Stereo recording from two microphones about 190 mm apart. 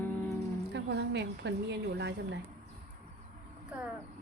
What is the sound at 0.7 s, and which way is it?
Speech, 60° right (ahead or behind).